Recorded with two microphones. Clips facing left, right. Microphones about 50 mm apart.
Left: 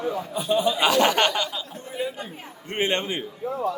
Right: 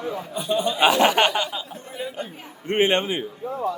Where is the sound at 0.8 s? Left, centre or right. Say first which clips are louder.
Right 5 dB; centre.